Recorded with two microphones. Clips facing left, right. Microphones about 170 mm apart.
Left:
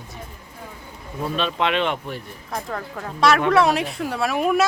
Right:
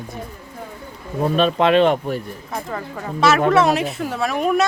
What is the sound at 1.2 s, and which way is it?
Speech, 45° right (ahead or behind).